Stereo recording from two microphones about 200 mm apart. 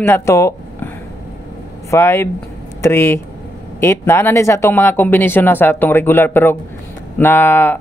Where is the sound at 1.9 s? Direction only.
15° left (ahead or behind).